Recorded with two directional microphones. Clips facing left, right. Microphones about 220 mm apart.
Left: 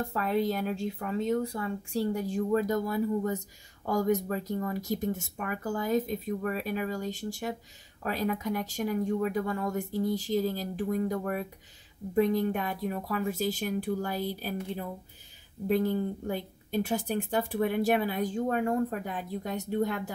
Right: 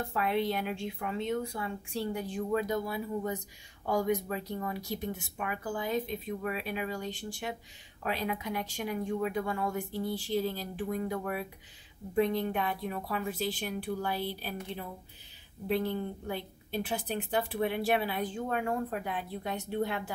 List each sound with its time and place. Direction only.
0.1 s a woman's voice: 40° left (ahead or behind)